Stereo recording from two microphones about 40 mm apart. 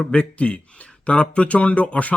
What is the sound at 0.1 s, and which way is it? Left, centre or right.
Speech, left.